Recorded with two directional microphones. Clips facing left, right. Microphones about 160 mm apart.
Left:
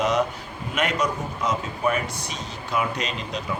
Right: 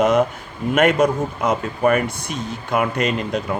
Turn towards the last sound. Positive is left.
turn(degrees=-50)  # may be behind; listen again after turning